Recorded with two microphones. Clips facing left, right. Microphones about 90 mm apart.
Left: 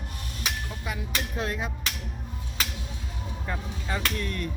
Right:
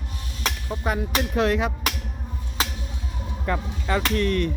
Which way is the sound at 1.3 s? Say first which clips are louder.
Right 11 dB; 80° right.